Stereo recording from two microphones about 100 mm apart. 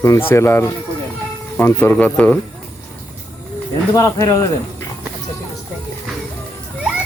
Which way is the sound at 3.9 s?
35° left (ahead or behind).